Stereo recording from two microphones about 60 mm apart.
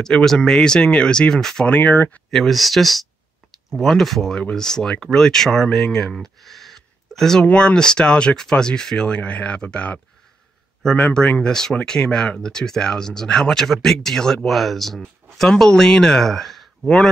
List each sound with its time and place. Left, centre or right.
0.0 s speech: centre
1.7 s speech: left
2.3 s speech: centre
7.4 s speech: centre